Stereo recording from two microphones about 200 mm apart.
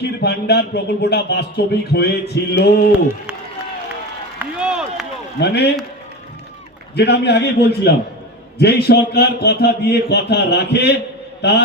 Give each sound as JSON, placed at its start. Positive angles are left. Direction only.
{"t": 0.0, "sound": "speech", "side_deg": 55}
{"t": 4.4, "sound": "a sound", "side_deg": -5}
{"t": 5.4, "sound": "speech", "side_deg": 55}
{"t": 6.9, "sound": "speech", "side_deg": 55}